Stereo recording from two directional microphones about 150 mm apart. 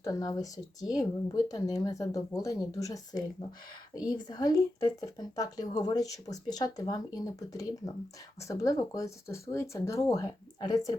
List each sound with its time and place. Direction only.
0.0 s speech: 25° left (ahead or behind)